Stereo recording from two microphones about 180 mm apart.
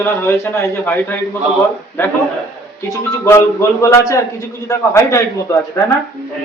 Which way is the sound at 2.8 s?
15° left (ahead or behind).